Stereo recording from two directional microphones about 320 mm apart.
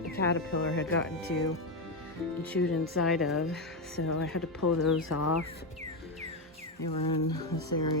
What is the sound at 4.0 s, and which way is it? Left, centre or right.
Speech, left.